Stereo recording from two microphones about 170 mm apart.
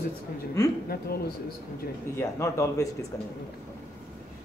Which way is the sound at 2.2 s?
15° left (ahead or behind).